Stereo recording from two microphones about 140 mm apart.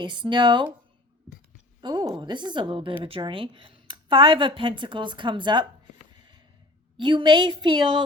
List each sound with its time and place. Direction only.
0.0 s speech: 35° right (ahead or behind)
1.8 s speech: 30° right (ahead or behind)
7.0 s speech: 35° right (ahead or behind)